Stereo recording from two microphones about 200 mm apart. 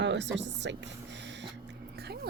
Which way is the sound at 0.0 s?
60° right (ahead or behind).